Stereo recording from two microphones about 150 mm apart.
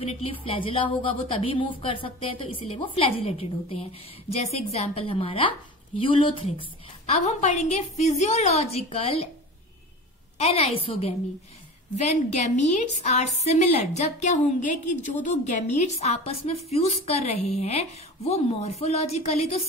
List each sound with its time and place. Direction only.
0.0 s a woman's voice: 40° left (ahead or behind)
7.1 s a woman's voice: 45° left (ahead or behind)
10.3 s a woman's voice: 45° left (ahead or behind)